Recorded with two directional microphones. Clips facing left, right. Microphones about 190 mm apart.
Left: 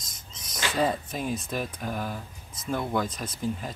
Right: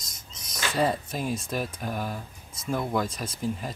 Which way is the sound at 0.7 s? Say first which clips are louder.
Right 1 dB; centre (ahead or behind).